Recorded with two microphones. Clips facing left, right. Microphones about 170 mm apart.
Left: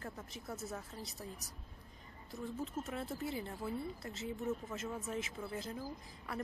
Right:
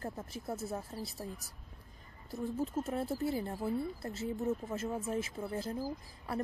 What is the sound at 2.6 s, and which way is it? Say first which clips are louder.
Speech: right 7 dB; 35° right (ahead or behind).